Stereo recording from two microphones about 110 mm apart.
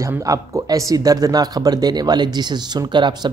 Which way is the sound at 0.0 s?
30° right (ahead or behind).